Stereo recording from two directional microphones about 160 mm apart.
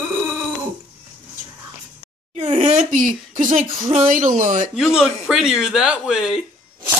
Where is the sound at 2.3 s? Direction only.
40° right (ahead or behind).